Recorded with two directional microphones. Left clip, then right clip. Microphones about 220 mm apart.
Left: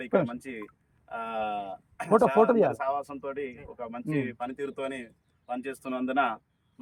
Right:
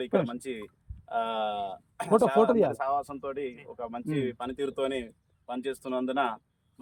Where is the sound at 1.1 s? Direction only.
20° right (ahead or behind).